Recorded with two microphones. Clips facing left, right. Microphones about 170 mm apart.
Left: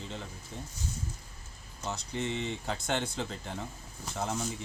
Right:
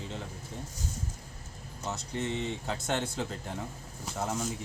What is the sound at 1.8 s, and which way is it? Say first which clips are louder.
Speech: even; centre (ahead or behind).